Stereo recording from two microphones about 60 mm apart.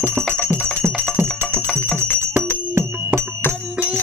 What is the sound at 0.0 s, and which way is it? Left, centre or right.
Music, right.